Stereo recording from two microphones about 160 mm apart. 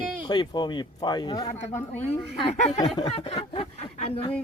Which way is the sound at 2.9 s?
35° left (ahead or behind).